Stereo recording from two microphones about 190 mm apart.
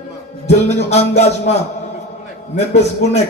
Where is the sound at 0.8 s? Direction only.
35° left (ahead or behind).